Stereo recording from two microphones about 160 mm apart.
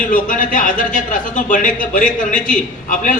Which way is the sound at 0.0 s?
55° left (ahead or behind).